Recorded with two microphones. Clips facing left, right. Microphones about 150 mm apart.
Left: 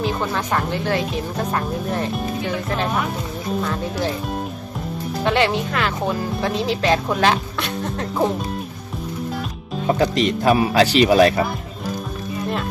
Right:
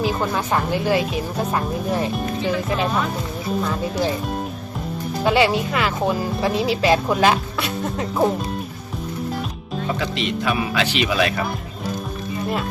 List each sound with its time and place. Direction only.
0.0 s speech: 5° right (ahead or behind)
5.2 s speech: 5° right (ahead or behind)
9.8 s speech: 40° left (ahead or behind)